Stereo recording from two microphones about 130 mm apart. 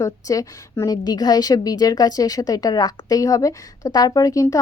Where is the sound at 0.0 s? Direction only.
25° left (ahead or behind).